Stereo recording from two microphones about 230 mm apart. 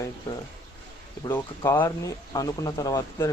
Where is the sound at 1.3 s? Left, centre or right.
Centre.